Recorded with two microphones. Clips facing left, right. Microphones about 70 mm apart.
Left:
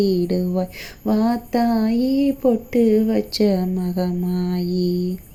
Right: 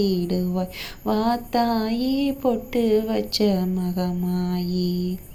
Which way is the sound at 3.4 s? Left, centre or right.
Left.